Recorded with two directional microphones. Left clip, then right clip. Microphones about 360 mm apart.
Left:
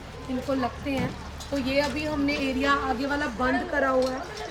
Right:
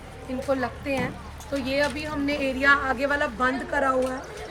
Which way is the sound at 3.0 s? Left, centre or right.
Right.